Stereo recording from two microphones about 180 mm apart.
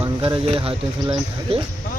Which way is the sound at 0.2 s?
30° right (ahead or behind).